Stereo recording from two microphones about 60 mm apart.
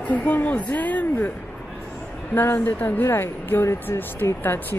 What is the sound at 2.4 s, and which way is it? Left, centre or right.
Speech, left.